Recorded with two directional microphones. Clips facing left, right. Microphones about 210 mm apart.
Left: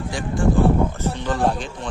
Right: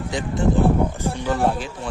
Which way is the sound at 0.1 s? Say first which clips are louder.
Even; 20° right (ahead or behind).